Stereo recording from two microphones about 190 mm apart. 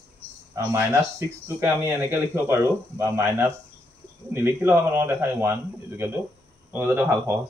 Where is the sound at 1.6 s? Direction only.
15° right (ahead or behind).